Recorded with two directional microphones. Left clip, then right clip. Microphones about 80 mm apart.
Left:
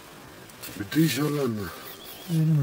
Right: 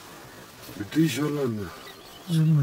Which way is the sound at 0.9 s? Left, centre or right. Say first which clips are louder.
Even; left.